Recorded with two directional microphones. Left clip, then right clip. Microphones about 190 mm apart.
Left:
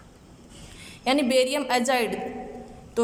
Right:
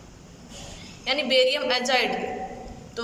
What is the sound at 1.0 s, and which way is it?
A woman's voice, 40° left (ahead or behind).